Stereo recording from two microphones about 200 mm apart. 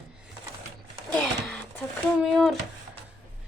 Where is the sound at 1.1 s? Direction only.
5° left (ahead or behind).